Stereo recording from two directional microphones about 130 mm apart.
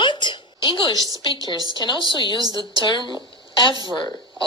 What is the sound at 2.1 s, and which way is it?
Speech, 35° left (ahead or behind).